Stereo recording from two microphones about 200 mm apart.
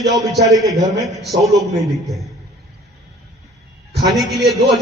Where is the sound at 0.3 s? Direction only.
Centre (ahead or behind).